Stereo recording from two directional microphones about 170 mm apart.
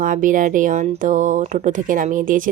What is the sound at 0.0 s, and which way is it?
Speech, 50° right (ahead or behind).